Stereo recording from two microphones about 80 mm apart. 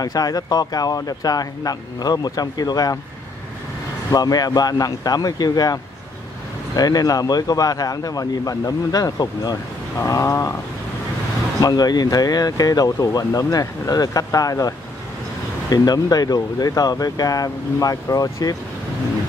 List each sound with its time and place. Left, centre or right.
0.0 s speech: left
4.1 s speech: left
9.9 s a sound: left
11.6 s speech: left
15.7 s speech: left